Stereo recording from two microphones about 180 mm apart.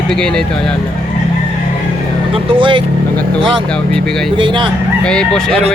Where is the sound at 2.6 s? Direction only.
30° right (ahead or behind).